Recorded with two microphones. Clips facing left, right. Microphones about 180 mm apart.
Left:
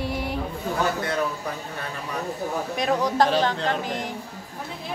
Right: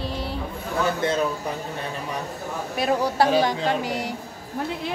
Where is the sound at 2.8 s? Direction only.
5° right (ahead or behind).